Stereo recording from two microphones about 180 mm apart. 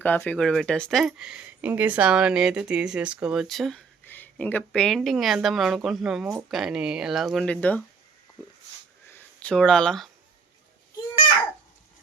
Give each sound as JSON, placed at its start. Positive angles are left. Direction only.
{"t": 0.0, "sound": "speech", "side_deg": 10}
{"t": 9.0, "sound": "speech", "side_deg": 10}